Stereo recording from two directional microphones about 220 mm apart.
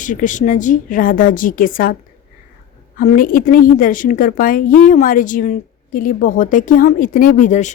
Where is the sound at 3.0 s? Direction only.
35° left (ahead or behind).